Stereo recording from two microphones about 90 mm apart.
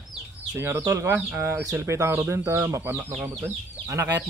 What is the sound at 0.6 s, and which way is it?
Speech, 30° right (ahead or behind).